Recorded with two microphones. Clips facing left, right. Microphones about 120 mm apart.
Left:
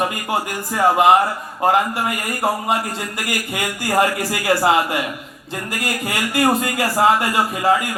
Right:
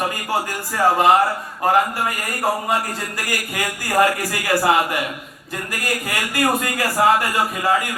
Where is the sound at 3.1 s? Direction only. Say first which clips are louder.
Left 1 dB; 25° left (ahead or behind).